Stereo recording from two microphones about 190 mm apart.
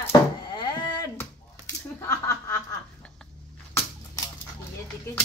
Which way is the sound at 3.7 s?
15° left (ahead or behind).